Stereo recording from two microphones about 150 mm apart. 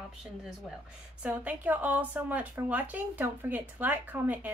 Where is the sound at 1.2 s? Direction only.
10° right (ahead or behind).